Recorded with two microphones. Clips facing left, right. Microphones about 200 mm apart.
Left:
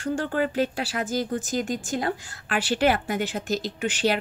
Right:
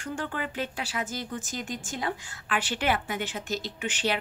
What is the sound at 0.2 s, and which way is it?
Speech, 35° left (ahead or behind).